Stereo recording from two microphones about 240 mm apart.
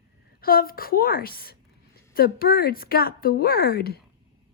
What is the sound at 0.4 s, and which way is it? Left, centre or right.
A woman's voice, left.